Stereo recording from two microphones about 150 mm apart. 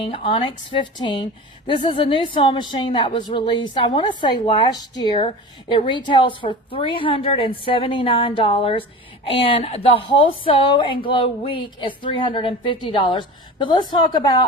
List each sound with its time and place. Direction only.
0.0 s a woman's voice: 35° left (ahead or behind)